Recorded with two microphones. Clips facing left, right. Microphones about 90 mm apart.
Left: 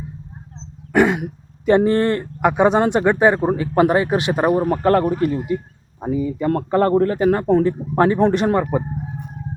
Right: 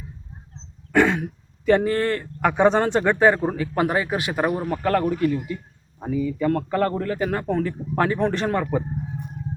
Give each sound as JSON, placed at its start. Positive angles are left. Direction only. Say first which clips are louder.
{"t": 0.9, "sound": "speech", "louder": "left 3 dB", "side_deg": 15}
{"t": 3.8, "sound": "a man's voice", "louder": "left 7 dB", "side_deg": 35}
{"t": 4.5, "sound": "a man's voice", "louder": "left 6 dB", "side_deg": 40}